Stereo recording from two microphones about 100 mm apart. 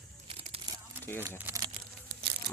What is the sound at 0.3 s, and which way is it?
Crumpling, 75° right (ahead or behind).